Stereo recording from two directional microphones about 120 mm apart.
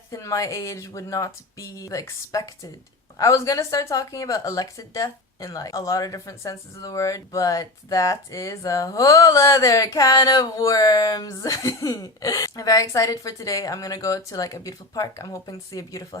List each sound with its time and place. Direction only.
0.1 s speech: 25° left (ahead or behind)